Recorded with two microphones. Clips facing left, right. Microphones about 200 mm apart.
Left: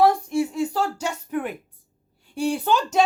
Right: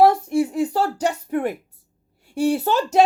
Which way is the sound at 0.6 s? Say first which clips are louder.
Right 3 dB; 35° right (ahead or behind).